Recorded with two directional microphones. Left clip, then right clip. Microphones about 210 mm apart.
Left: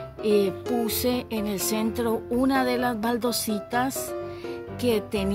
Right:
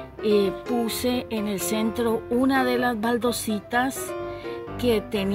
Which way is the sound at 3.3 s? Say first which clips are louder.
Even; 35° left (ahead or behind).